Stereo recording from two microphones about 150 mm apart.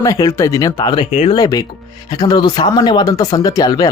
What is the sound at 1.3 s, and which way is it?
Speech, 25° left (ahead or behind).